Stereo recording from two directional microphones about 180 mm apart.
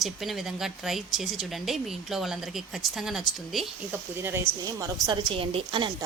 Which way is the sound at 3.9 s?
15° right (ahead or behind).